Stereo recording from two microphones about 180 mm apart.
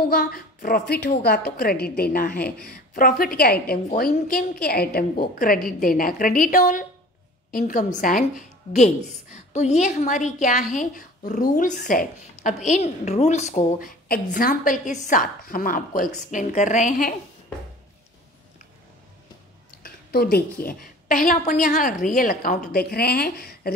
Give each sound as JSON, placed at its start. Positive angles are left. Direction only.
{"t": 0.1, "sound": "a woman's voice", "side_deg": 55}
{"t": 19.8, "sound": "a woman's voice", "side_deg": 60}